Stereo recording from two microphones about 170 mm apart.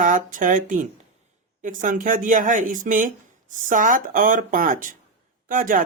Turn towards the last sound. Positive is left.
turn(degrees=-55)  # may be behind; listen again after turning